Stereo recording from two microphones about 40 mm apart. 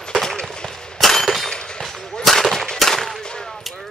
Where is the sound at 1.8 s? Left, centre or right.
Centre.